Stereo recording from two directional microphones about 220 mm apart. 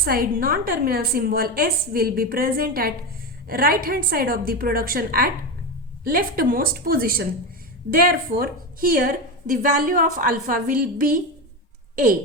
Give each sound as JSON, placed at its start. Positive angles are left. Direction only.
{"t": 0.0, "sound": "a woman's voice", "side_deg": -45}